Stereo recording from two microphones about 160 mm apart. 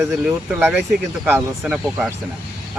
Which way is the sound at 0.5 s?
15° right (ahead or behind).